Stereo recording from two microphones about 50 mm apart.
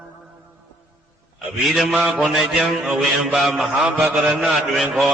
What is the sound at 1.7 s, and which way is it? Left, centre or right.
Speech, centre.